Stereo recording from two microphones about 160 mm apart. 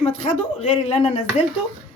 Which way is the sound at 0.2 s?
50° left (ahead or behind).